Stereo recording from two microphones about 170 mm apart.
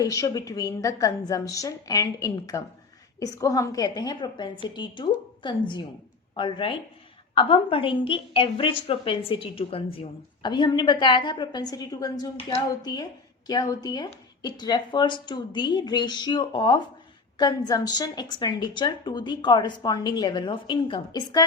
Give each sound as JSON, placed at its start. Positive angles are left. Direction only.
{"t": 0.0, "sound": "a woman's voice", "side_deg": 20}